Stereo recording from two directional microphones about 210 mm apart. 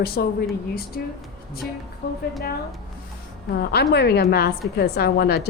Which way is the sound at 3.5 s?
50° left (ahead or behind).